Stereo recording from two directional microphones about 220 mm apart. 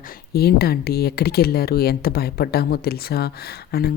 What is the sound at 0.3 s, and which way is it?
Speech, 45° left (ahead or behind).